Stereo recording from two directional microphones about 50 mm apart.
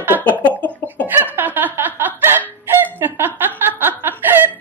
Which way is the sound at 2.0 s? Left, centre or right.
Right.